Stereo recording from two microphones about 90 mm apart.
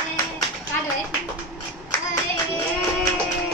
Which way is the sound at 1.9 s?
40° left (ahead or behind).